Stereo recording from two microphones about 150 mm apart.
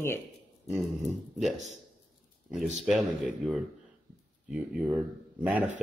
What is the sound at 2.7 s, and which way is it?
Speech, centre (ahead or behind).